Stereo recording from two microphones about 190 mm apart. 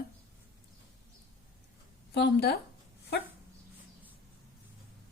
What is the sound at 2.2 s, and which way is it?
Speech, 60° left (ahead or behind).